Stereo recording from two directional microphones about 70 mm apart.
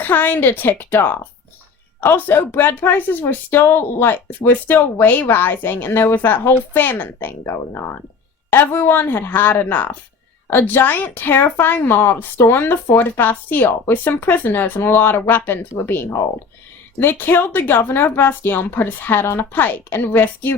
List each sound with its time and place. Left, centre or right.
0.0 s speech: left